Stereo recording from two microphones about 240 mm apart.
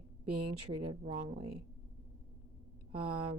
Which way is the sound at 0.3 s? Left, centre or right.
Right.